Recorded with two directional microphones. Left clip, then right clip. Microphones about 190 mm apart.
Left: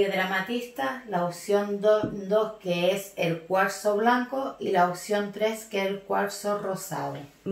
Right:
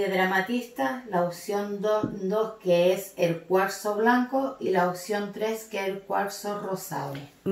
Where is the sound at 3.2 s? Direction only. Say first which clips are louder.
Right 1 dB; 30° left (ahead or behind).